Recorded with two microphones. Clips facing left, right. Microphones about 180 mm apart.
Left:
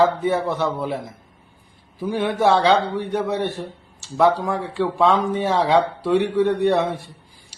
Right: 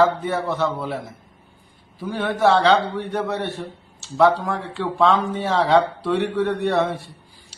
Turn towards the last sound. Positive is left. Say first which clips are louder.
# left 2 dB
turn(degrees=15)  # may be behind; listen again after turning